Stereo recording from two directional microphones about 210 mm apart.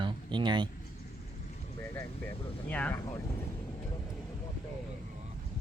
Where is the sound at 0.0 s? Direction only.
20° right (ahead or behind).